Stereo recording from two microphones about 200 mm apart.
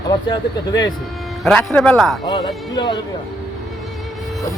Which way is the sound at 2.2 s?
20° left (ahead or behind).